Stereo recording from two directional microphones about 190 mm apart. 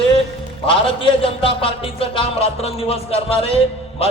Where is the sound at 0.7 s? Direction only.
25° left (ahead or behind).